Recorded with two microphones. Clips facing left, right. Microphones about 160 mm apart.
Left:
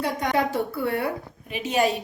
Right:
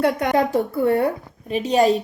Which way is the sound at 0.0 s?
60° right (ahead or behind).